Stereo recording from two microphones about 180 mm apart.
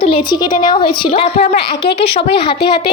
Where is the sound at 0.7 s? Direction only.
30° left (ahead or behind).